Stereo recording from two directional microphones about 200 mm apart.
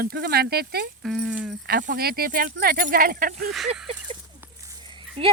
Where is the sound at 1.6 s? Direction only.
45° right (ahead or behind).